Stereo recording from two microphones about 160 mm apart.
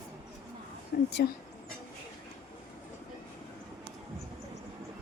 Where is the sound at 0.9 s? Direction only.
75° left (ahead or behind).